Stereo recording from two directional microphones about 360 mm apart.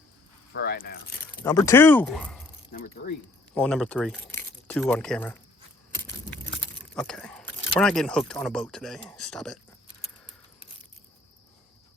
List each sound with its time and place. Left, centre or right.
0.5 s speech: left
1.5 s speech: centre
3.0 s speech: left
3.5 s speech: centre
6.9 s speech: centre